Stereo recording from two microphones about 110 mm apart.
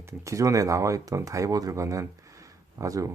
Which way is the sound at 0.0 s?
30° right (ahead or behind).